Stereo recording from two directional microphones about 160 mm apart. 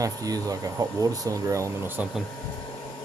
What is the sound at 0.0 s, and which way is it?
Speech, 20° right (ahead or behind).